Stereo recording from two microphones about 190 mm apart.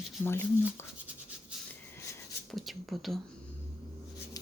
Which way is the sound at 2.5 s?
Centre (ahead or behind).